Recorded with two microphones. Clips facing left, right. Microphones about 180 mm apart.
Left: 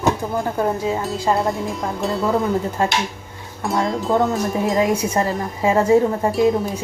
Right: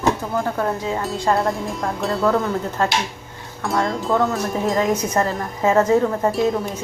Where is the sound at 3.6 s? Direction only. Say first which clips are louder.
Left 1 dB; centre (ahead or behind).